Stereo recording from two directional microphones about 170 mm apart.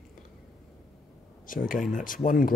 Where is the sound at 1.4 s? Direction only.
55° left (ahead or behind).